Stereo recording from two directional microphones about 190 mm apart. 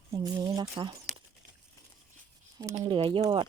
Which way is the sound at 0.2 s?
20° right (ahead or behind).